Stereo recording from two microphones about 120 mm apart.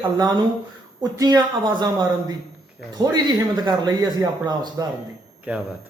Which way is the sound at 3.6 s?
35° right (ahead or behind).